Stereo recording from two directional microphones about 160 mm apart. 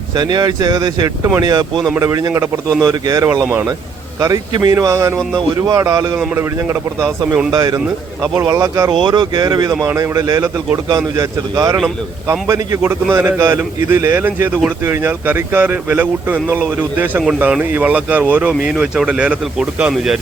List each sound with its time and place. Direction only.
0.2 s a man's voice: 25° right (ahead or behind); by 20.1 s 5° right (ahead or behind)